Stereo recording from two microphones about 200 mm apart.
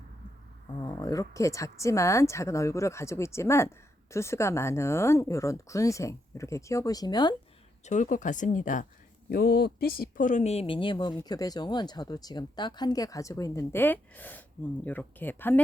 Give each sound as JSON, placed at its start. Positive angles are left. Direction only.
{"t": 0.8, "sound": "speech", "side_deg": 20}
{"t": 7.9, "sound": "speech", "side_deg": 40}
{"t": 9.3, "sound": "speech", "side_deg": 50}